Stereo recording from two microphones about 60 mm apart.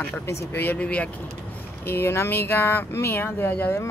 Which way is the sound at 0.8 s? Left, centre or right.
Left.